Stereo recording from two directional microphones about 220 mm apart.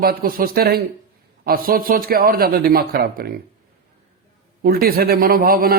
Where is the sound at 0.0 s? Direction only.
40° right (ahead or behind).